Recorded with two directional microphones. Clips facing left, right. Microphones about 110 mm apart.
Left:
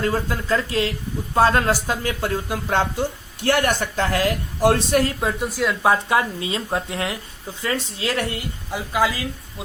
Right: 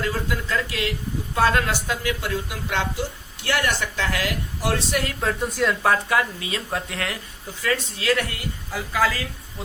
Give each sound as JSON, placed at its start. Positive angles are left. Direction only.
{"t": 0.0, "sound": "speech", "side_deg": 35}
{"t": 5.2, "sound": "speech", "side_deg": 10}
{"t": 5.8, "sound": "speech", "side_deg": 20}